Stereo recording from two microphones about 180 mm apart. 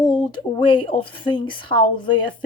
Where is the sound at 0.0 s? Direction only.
25° left (ahead or behind).